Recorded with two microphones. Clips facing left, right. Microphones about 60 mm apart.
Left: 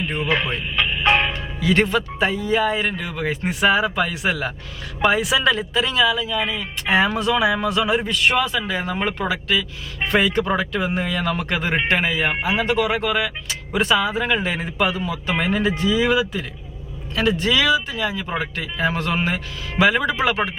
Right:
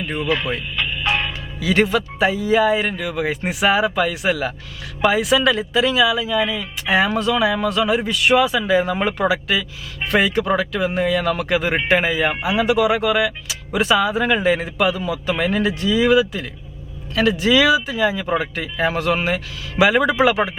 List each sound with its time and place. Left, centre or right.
0.2 s speech: left
0.8 s music: left
1.3 s speech: centre